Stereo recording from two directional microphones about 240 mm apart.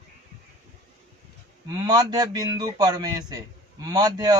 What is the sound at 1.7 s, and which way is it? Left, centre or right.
A man's voice, centre.